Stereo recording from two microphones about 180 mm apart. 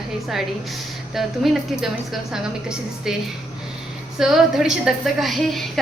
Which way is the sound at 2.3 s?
5° right (ahead or behind).